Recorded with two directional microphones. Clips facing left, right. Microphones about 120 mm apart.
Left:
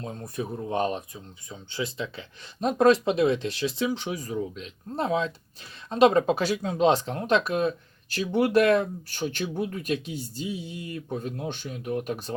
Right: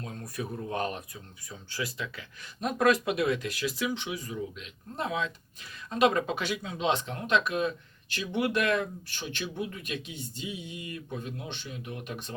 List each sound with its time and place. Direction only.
0.0 s speech: 25° left (ahead or behind)
3.9 s speech: 40° left (ahead or behind)